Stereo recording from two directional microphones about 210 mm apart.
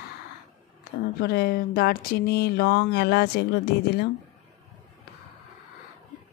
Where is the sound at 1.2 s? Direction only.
45° left (ahead or behind).